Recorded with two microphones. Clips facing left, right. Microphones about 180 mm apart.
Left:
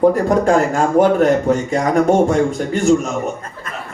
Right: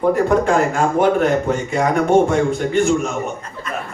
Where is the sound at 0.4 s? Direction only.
40° left (ahead or behind).